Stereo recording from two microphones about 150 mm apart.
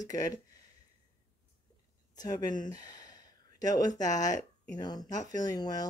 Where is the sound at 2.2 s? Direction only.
25° left (ahead or behind).